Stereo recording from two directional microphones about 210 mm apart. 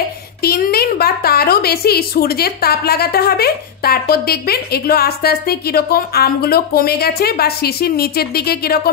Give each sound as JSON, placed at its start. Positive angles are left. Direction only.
{"t": 0.4, "sound": "a woman's voice", "side_deg": 45}